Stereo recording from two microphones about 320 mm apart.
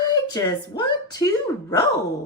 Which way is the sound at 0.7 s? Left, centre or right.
Centre.